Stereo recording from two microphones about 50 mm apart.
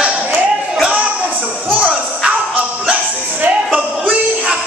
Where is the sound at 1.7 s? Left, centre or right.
Centre.